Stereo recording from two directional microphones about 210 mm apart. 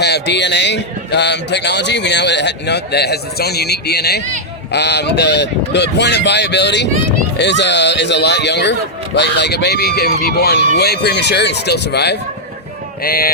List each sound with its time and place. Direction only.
0.0 s a man's voice: 55° left (ahead or behind)